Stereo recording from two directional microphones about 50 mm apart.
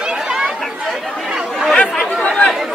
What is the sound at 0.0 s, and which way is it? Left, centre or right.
Chatter, centre.